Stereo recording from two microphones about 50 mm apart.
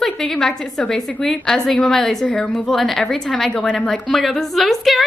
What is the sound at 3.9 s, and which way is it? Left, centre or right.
A woman's voice, centre.